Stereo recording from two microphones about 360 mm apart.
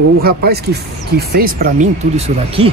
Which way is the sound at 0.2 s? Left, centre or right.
Right.